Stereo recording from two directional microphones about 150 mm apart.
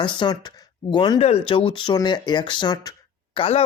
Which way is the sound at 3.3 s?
40° left (ahead or behind).